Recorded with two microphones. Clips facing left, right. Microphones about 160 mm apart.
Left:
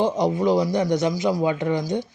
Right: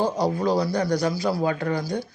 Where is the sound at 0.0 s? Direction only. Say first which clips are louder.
Left 2 dB; 20° left (ahead or behind).